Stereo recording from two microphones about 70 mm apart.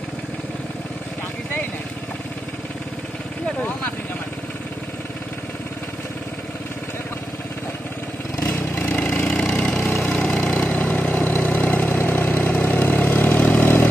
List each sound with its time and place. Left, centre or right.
8.4 s vehicle: left
8.8 s engine: left
10.1 s vehicle: centre; by 13.8 s left